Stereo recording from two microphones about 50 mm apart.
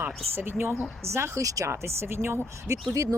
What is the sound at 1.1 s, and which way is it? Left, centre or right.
Speech, right.